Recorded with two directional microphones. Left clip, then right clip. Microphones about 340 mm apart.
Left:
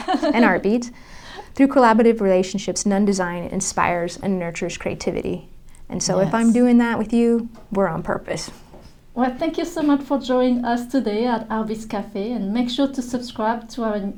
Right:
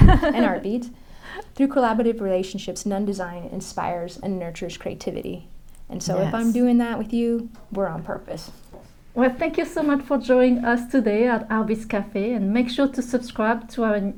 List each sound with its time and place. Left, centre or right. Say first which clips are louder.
0.0 s a sound: right 1 dB; right
0.3 s speech: left 5 dB; left
9.1 s a woman's voice: right 1 dB; right